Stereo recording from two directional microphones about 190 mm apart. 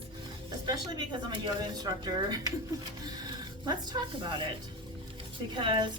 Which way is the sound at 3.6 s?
20° right (ahead or behind).